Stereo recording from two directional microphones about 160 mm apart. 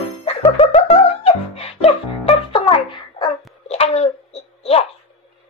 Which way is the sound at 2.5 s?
30° left (ahead or behind).